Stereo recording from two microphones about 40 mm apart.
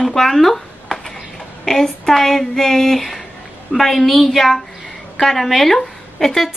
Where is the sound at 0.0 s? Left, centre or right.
Centre.